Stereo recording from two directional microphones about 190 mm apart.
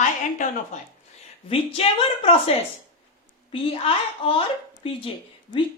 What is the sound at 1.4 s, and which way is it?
Speech, 30° left (ahead or behind).